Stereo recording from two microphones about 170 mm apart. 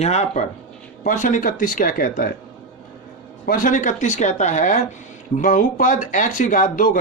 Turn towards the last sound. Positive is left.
turn(degrees=50)  # may be behind; listen again after turning